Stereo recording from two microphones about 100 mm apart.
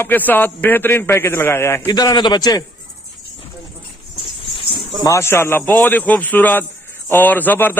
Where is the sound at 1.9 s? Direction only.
40° left (ahead or behind).